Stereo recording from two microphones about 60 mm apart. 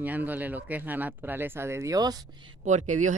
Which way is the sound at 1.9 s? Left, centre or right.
Right.